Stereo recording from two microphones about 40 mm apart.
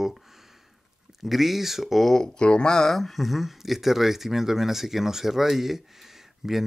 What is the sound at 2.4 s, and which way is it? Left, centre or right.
Speech, left.